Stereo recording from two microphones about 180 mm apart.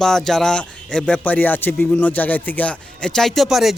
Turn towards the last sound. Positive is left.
turn(degrees=0)  # may be behind; listen again after turning